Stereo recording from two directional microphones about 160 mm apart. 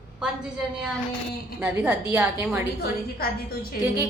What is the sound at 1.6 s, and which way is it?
A woman's voice, 10° right (ahead or behind).